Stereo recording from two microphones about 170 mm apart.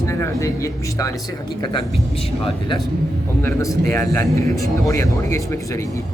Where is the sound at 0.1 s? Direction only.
15° left (ahead or behind).